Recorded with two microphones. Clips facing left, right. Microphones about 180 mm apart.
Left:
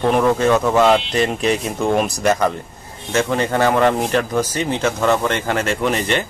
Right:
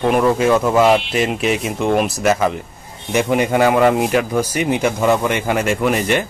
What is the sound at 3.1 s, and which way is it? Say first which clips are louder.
Speech: right 2 dB; 15° right (ahead or behind).